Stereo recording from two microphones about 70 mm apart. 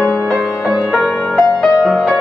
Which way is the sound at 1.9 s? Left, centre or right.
Centre.